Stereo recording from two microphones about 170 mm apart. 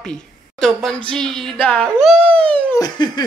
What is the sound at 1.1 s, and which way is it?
Speech, centre (ahead or behind).